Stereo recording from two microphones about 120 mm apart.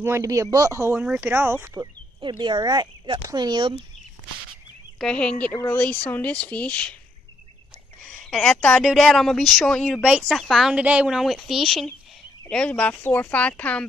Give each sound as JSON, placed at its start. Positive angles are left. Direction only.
{"t": 0.0, "sound": "speech", "side_deg": -25}
{"t": 1.0, "sound": "speech", "side_deg": -10}
{"t": 2.1, "sound": "speech", "side_deg": -40}
{"t": 4.9, "sound": "speech", "side_deg": 5}
{"t": 8.1, "sound": "speech", "side_deg": 5}